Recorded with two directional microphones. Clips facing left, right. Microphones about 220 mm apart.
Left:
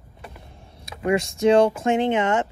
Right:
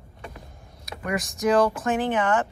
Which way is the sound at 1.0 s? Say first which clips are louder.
Left 6 dB; 30° left (ahead or behind).